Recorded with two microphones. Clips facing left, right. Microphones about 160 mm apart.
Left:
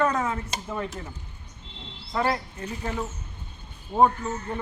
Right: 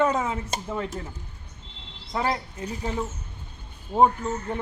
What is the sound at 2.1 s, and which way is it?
Speech, 15° right (ahead or behind).